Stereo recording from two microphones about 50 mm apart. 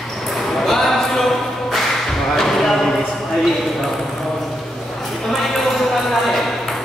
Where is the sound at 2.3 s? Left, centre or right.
Centre.